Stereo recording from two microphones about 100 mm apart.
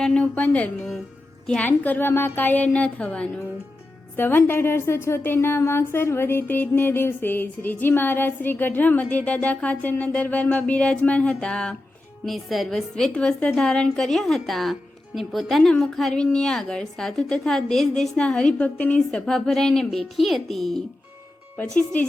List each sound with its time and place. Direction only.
0.0 s a woman's voice: 10° left (ahead or behind)
21.6 s a woman's voice: 15° left (ahead or behind)